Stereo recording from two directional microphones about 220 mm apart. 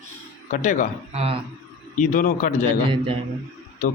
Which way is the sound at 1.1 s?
30° right (ahead or behind).